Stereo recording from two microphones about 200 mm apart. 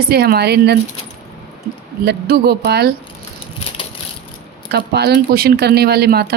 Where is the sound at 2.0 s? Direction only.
55° right (ahead or behind).